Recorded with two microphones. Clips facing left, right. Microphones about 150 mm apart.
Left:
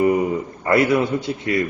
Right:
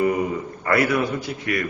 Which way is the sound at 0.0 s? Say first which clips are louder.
Left 4 dB; 20° left (ahead or behind).